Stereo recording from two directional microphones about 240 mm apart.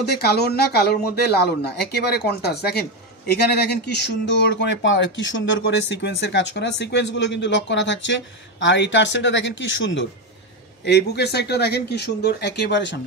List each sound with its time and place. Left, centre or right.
0.0 s speech: left